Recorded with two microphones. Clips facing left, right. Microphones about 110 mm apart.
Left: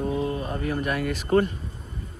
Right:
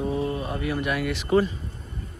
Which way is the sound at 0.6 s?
40° left (ahead or behind).